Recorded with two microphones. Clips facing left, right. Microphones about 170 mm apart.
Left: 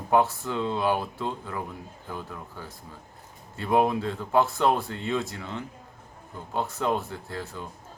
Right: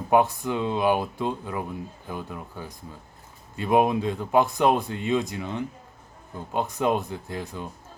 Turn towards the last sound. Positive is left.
turn(degrees=-15)  # may be behind; listen again after turning